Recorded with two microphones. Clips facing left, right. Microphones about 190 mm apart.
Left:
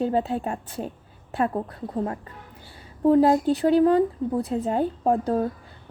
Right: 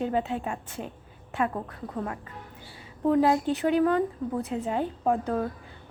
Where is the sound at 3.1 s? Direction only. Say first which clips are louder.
Left 5 dB; 35° left (ahead or behind).